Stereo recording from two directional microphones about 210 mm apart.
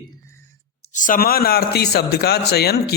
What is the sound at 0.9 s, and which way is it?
A man's voice, 40° left (ahead or behind).